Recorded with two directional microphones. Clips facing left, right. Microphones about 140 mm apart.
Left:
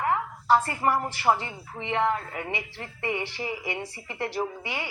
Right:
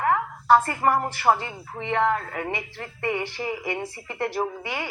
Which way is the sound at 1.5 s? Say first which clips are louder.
Right 3 dB; 50° right (ahead or behind).